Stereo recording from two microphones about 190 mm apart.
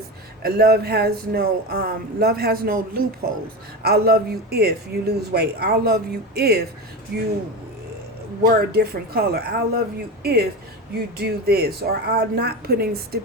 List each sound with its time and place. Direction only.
0.4 s speech: 55° right (ahead or behind)
8.4 s speech: 55° right (ahead or behind)
11.2 s speech: 55° right (ahead or behind)